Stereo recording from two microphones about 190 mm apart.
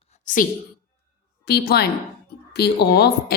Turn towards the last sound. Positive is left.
turn(degrees=60)  # may be behind; listen again after turning